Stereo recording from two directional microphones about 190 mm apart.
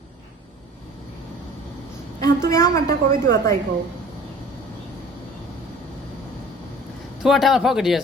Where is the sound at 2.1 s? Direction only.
15° left (ahead or behind).